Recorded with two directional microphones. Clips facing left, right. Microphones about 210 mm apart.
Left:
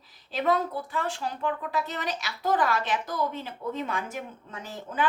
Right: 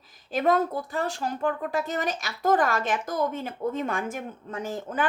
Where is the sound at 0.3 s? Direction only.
45° right (ahead or behind).